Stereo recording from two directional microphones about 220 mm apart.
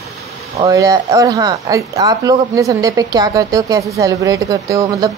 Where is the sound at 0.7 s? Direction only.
15° right (ahead or behind).